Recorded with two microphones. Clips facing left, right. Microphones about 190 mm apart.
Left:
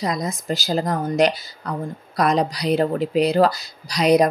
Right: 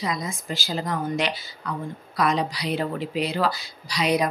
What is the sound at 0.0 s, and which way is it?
Speech, 40° left (ahead or behind).